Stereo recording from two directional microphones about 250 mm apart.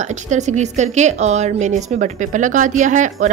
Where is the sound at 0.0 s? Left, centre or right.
Right.